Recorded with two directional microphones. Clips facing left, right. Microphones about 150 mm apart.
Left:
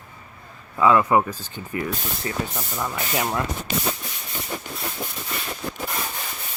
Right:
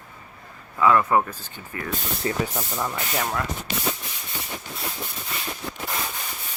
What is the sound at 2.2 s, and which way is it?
Speech, 30° right (ahead or behind).